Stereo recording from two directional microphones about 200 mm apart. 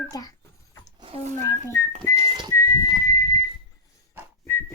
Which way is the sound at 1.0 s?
30° right (ahead or behind).